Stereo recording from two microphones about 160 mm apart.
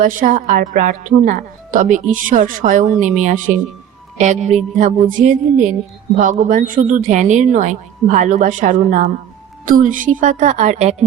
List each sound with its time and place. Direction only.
0.0 s a woman's voice: 55° right (ahead or behind)